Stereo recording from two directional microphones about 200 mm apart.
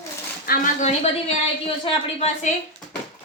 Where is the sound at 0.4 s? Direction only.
45° left (ahead or behind).